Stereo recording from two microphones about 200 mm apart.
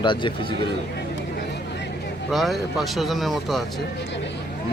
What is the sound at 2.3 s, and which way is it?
Speech, centre (ahead or behind).